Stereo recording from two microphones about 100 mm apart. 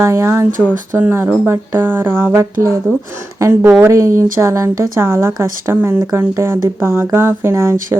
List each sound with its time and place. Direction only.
0.0 s speech: 25° right (ahead or behind)